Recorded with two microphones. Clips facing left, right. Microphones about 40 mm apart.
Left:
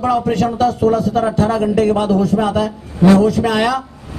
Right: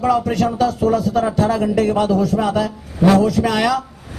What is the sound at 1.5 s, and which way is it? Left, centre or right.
A man's voice, left.